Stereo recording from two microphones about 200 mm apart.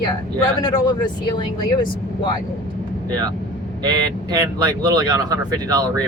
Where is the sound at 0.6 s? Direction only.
20° left (ahead or behind).